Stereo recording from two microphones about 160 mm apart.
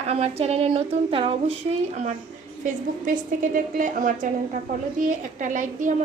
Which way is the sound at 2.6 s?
55° right (ahead or behind).